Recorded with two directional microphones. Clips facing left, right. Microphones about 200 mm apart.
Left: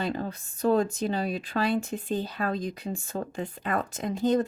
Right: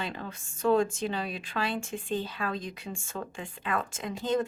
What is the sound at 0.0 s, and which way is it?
Speech, 40° left (ahead or behind).